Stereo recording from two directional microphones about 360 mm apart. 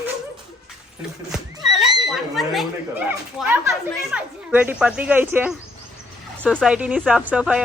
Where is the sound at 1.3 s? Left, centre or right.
Centre.